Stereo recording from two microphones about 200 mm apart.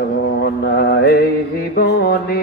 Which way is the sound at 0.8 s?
50° left (ahead or behind).